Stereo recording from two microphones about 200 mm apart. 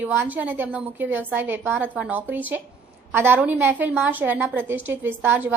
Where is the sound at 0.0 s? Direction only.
10° right (ahead or behind).